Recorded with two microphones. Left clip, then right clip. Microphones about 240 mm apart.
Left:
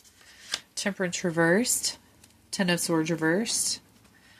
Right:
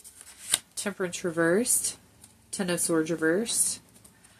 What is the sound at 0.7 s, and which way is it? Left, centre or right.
Speech, left.